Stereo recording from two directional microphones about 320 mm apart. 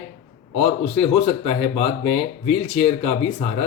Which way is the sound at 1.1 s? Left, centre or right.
Centre.